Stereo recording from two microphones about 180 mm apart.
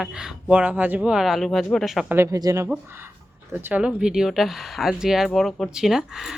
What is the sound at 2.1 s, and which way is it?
A woman's voice, 20° right (ahead or behind).